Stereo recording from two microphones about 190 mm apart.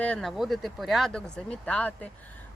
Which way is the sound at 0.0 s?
5° left (ahead or behind).